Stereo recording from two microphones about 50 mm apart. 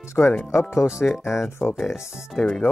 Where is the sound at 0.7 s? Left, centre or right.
Left.